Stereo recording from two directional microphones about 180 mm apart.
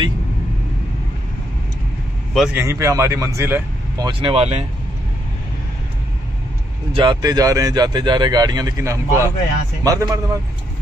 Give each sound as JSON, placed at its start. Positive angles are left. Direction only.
{"t": 2.3, "sound": "speech", "side_deg": -5}
{"t": 2.6, "sound": "speech", "side_deg": -15}
{"t": 4.0, "sound": "speech", "side_deg": -30}
{"t": 6.9, "sound": "speech", "side_deg": -25}